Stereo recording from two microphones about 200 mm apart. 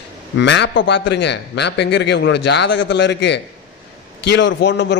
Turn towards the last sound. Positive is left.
turn(degrees=60)  # may be behind; listen again after turning